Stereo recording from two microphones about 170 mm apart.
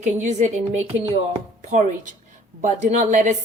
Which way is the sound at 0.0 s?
45° right (ahead or behind).